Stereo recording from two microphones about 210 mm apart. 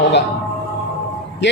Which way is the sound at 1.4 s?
55° left (ahead or behind).